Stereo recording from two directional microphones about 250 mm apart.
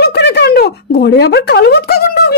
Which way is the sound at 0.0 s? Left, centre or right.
Left.